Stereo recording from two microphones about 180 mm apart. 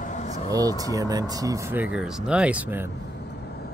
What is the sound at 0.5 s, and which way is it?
Speech, 20° right (ahead or behind).